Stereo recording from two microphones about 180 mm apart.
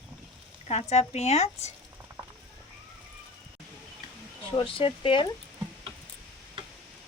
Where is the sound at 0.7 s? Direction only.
35° left (ahead or behind).